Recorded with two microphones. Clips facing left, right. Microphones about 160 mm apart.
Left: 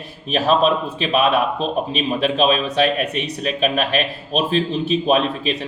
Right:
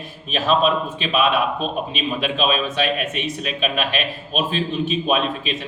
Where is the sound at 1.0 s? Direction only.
40° left (ahead or behind).